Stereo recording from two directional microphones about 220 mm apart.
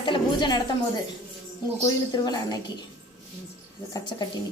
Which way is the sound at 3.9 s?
20° left (ahead or behind).